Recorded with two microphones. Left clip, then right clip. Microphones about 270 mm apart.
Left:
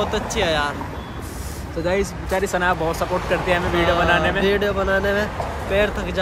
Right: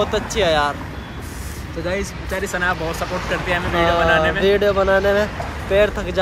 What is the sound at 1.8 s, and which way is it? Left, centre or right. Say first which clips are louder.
Speech: left 3 dB; centre.